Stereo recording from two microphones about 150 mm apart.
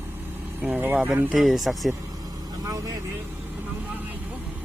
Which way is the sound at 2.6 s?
20° right (ahead or behind).